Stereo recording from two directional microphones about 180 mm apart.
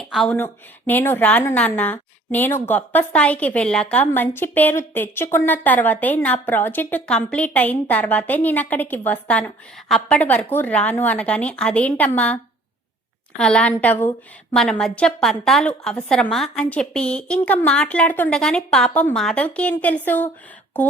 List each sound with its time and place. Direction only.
0.0 s a sound: centre (ahead or behind)
0.3 s a woman's voice: 10° left (ahead or behind)
13.4 s a woman's voice: 5° left (ahead or behind)